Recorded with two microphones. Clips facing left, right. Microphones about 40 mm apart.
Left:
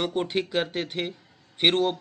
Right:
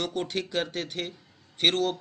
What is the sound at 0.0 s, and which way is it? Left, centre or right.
A man's voice, centre.